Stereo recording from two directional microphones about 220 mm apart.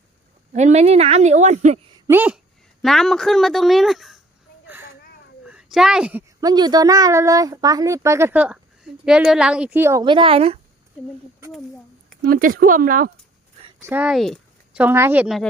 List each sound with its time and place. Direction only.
0.5 s speech: 30° right (ahead or behind)
2.0 s a woman's voice: 10° right (ahead or behind)
5.5 s a sound: 5° right (ahead or behind)
6.4 s speech: 20° right (ahead or behind)
12.2 s speech: 40° right (ahead or behind)
13.8 s speech: 5° right (ahead or behind)